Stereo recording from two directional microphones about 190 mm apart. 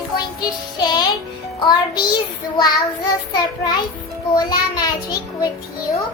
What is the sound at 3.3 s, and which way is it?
Music, 20° left (ahead or behind).